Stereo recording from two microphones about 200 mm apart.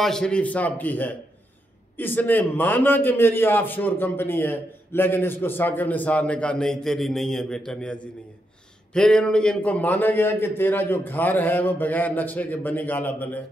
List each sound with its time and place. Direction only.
0.0 s a man's voice: 5° left (ahead or behind)